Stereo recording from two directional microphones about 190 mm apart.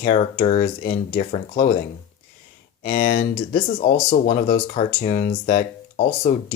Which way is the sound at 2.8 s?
45° left (ahead or behind).